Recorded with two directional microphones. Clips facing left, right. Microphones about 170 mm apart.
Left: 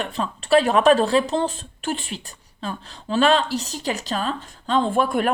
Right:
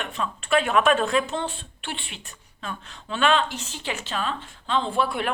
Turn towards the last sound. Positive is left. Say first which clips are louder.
# left 5 dB
turn(degrees=45)  # may be behind; listen again after turning